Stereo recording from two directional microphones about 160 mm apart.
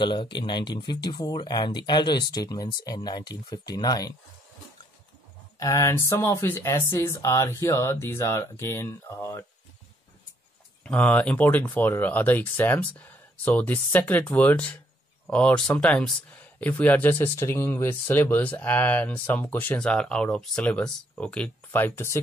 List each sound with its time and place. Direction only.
0.0 s speech: 30° left (ahead or behind)
5.6 s speech: 20° left (ahead or behind)
10.8 s speech: 10° left (ahead or behind)